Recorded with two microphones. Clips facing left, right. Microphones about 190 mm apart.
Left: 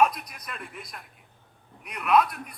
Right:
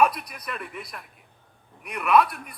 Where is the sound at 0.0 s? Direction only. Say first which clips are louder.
Right 1 dB; 60° right (ahead or behind).